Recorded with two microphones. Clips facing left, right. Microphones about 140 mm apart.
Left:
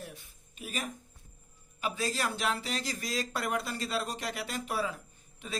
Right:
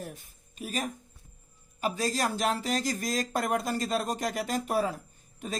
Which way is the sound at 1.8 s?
40° right (ahead or behind).